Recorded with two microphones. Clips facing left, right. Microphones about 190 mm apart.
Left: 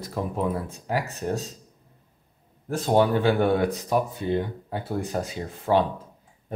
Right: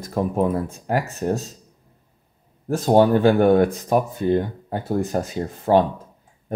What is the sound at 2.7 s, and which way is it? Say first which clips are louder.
Speech: right 5 dB; 45° right (ahead or behind).